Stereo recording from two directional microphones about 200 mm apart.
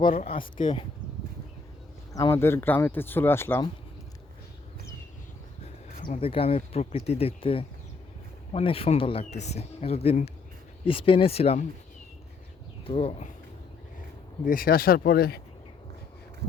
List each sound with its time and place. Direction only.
0.1 s speech: 35° left (ahead or behind)
2.1 s speech: 15° left (ahead or behind)
6.1 s speech: 30° left (ahead or behind)
12.8 s speech: 30° left (ahead or behind)
14.4 s speech: 45° left (ahead or behind)